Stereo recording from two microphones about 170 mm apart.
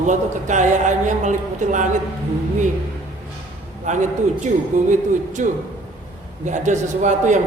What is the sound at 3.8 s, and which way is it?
A woman's voice, 45° right (ahead or behind).